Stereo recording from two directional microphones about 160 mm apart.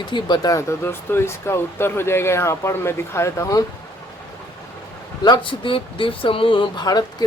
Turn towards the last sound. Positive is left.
turn(degrees=25)  # may be behind; listen again after turning